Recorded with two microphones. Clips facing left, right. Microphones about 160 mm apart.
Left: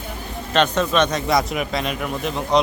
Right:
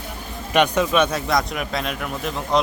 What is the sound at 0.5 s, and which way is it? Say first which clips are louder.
Speech: even; 10° right (ahead or behind).